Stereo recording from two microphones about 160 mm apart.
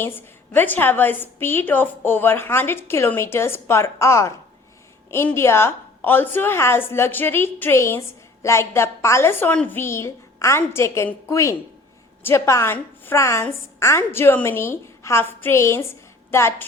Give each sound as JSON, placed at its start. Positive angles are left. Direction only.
{"t": 0.0, "sound": "a woman's voice", "side_deg": 15}